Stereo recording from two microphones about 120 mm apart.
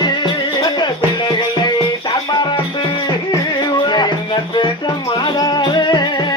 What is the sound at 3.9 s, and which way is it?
Music, 40° left (ahead or behind).